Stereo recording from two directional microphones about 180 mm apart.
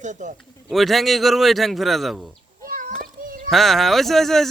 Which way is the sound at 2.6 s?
50° right (ahead or behind).